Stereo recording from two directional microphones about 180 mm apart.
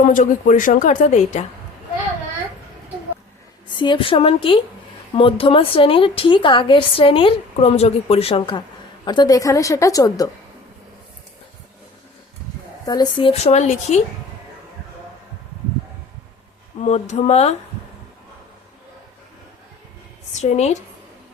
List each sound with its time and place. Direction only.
0.0 s a woman's voice: 45° left (ahead or behind)
3.8 s a woman's voice: 30° left (ahead or behind)
12.8 s a woman's voice: 20° left (ahead or behind); by 14.0 s 40° left (ahead or behind)
16.8 s a woman's voice: 40° left (ahead or behind)
20.3 s a woman's voice: 40° left (ahead or behind)